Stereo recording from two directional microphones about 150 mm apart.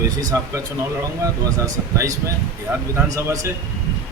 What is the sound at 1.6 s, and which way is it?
A man's voice, 20° right (ahead or behind).